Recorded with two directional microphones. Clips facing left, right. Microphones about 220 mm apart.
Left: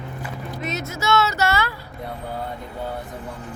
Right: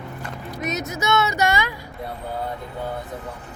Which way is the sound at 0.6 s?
20° right (ahead or behind).